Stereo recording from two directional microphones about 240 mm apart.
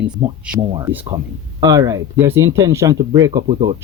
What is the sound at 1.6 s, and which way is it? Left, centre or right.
Speech, centre.